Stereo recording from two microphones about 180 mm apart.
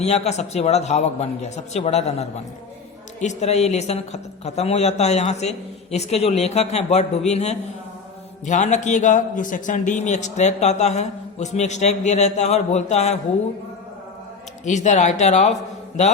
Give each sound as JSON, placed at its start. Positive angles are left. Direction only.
{"t": 0.0, "sound": "a man's voice", "side_deg": 40}
{"t": 14.6, "sound": "a man's voice", "side_deg": 40}